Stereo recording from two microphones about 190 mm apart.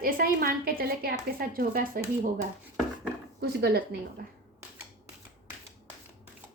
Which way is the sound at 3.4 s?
55° right (ahead or behind).